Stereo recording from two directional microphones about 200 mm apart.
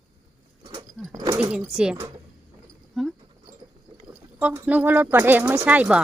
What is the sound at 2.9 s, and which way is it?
Dog, centre (ahead or behind).